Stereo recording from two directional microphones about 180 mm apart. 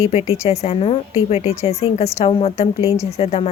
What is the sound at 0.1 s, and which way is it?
Speech, 35° left (ahead or behind).